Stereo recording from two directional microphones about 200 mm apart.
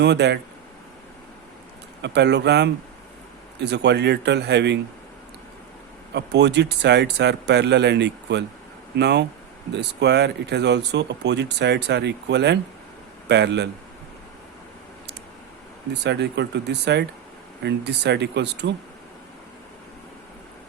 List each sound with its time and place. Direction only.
0.0 s speech: 60° right (ahead or behind)
2.0 s speech: 60° right (ahead or behind)
6.1 s speech: 60° right (ahead or behind)
15.9 s speech: 60° right (ahead or behind)